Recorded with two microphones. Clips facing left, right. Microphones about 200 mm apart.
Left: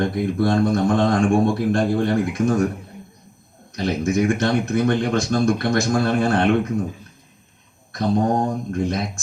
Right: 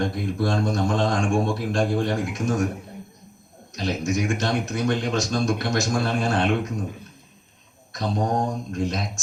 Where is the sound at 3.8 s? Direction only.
55° left (ahead or behind).